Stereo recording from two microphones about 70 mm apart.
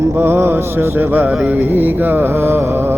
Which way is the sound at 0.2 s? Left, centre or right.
Right.